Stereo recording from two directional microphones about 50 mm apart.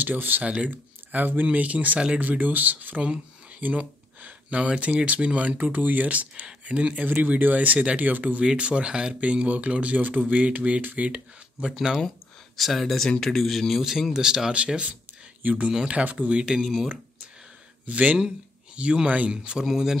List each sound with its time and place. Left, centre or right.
0.0 s speech: right
0.4 s speech: right
11.6 s speech: centre
12.5 s a man's voice: centre
15.4 s speech: right
16.6 s a man's voice: centre
17.8 s speech: right
19.3 s speech: centre